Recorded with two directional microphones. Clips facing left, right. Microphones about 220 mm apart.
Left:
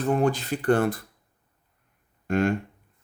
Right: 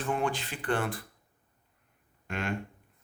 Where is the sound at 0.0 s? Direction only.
40° left (ahead or behind).